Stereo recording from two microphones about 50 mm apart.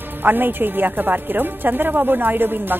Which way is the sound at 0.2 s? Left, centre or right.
Right.